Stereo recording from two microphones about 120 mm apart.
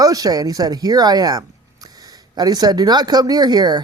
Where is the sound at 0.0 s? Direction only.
30° right (ahead or behind).